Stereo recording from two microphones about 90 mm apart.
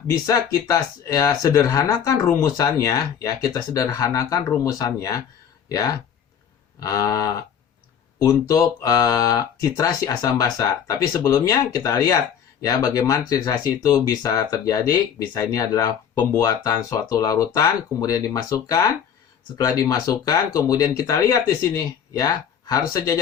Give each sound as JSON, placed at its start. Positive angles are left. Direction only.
{"t": 0.3, "sound": "speech", "side_deg": 40}